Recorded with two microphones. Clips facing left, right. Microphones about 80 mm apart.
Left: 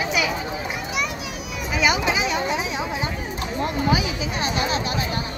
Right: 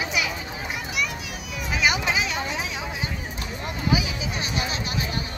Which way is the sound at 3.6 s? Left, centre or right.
Left.